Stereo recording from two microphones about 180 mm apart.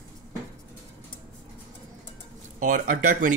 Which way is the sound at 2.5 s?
45° right (ahead or behind).